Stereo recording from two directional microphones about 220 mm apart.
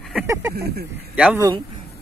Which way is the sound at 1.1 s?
5° right (ahead or behind).